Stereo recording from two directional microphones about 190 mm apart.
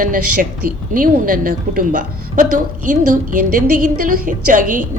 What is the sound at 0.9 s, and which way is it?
A woman's voice, 50° right (ahead or behind).